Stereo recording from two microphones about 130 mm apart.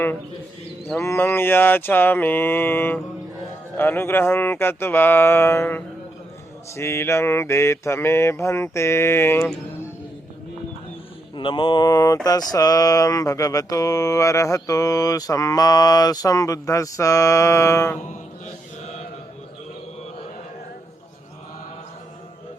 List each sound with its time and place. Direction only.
0.9 s mantra: 20° left (ahead or behind)
11.3 s mantra: 40° left (ahead or behind); by 17.9 s 20° left (ahead or behind)